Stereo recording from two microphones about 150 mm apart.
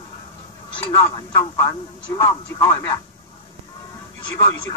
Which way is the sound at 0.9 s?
25° left (ahead or behind).